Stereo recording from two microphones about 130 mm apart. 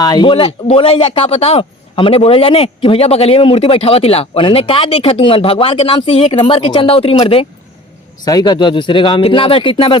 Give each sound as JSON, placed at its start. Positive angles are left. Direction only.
{"t": 0.0, "sound": "speech", "side_deg": 30}
{"t": 8.2, "sound": "speech", "side_deg": 30}